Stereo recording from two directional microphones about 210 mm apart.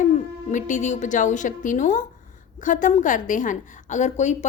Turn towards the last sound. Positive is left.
turn(degrees=35)  # may be behind; listen again after turning